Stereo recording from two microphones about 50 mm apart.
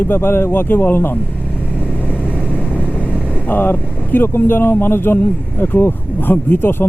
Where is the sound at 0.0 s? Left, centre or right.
Left.